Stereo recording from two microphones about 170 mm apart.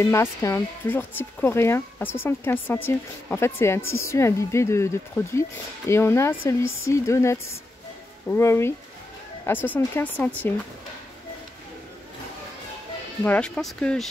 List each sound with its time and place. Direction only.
0.0 s speech: 15° left (ahead or behind)
13.2 s speech: 5° left (ahead or behind)